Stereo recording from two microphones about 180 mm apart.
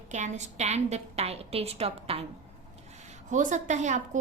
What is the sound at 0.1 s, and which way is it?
A woman's voice, 40° right (ahead or behind).